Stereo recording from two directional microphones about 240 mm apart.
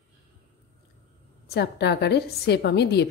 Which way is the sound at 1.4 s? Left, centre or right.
Left.